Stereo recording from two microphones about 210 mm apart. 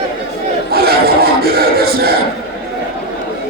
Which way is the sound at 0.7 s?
45° right (ahead or behind).